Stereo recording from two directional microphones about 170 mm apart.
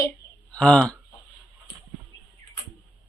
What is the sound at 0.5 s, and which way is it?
Speech, 5° left (ahead or behind).